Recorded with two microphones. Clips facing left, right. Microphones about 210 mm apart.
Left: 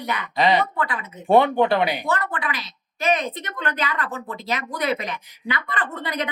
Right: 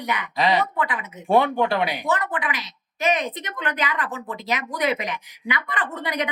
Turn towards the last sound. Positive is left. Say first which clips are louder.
# right 1 dB
turn(degrees=-15)  # may be behind; listen again after turning